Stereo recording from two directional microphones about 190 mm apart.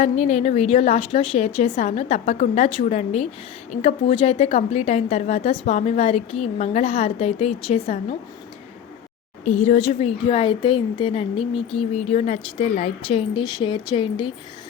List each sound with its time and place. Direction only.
0.0 s a woman's voice: 35° left (ahead or behind)
9.4 s a woman's voice: 40° left (ahead or behind)